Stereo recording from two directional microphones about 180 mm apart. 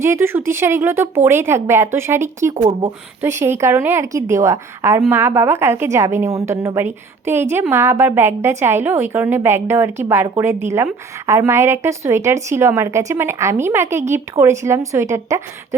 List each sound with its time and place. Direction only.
0.0 s a woman's voice: 15° right (ahead or behind)
2.6 s speech: 40° right (ahead or behind)
3.2 s a woman's voice: 15° right (ahead or behind)